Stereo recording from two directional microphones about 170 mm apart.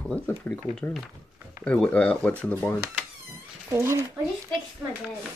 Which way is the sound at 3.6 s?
15° right (ahead or behind).